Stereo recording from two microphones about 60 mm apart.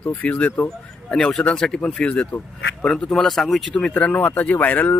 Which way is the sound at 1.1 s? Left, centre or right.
Centre.